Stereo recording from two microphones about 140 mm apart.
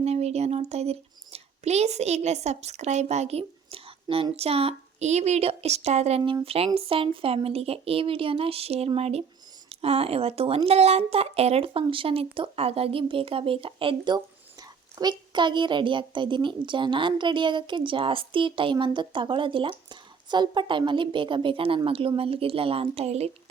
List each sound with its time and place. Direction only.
0.0 s a child's voice: 50° right (ahead or behind)